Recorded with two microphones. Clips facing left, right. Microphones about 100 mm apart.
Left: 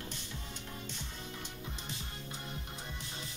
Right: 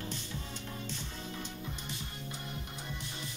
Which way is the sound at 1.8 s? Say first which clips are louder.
Right 2 dB; 25° left (ahead or behind).